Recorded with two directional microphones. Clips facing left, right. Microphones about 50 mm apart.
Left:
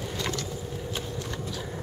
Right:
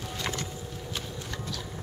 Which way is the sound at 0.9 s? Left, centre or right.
Centre.